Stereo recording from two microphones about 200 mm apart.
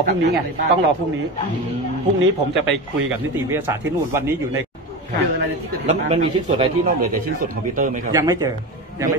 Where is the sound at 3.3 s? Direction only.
10° right (ahead or behind).